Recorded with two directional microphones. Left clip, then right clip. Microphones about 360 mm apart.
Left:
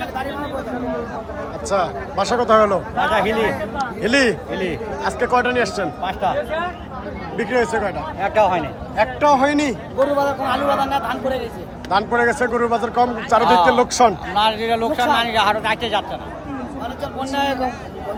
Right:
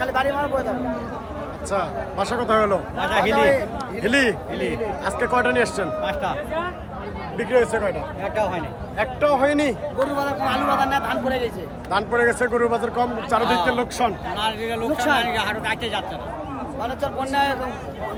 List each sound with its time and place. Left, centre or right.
1.7 s speech: centre
7.3 s speech: centre
8.2 s speech: left
9.0 s a man's voice: centre